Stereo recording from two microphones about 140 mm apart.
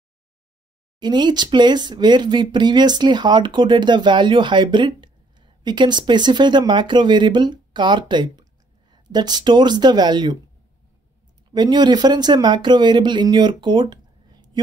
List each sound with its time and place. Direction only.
0.9 s speech: 30° right (ahead or behind)
11.5 s speech: 30° right (ahead or behind)